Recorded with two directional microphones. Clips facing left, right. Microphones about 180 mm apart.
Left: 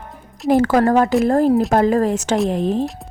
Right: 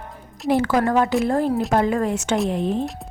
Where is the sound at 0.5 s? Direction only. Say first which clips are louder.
Left 4 dB; 45° left (ahead or behind).